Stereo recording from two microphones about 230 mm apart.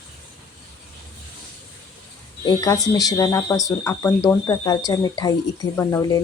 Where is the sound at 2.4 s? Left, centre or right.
Centre.